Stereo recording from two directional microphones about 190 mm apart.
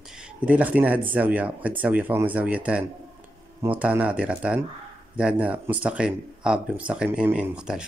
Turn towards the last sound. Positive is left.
turn(degrees=-5)  # may be behind; listen again after turning